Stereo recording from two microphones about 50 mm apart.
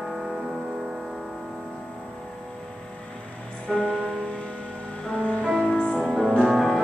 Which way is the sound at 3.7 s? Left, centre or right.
Centre.